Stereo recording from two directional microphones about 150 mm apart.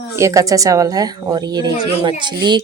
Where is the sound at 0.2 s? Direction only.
20° right (ahead or behind).